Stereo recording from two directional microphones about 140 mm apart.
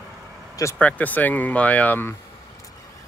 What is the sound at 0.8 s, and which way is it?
Speech, 10° left (ahead or behind).